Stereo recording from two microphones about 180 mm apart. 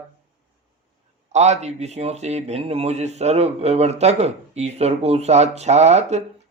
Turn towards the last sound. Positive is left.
turn(degrees=-40)  # may be behind; listen again after turning